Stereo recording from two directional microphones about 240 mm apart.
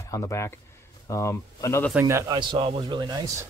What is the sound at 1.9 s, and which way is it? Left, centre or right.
Speech, centre.